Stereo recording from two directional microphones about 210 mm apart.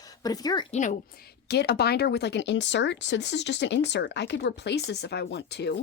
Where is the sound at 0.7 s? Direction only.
35° left (ahead or behind).